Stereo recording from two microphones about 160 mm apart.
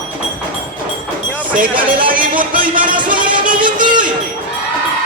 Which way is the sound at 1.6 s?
30° right (ahead or behind).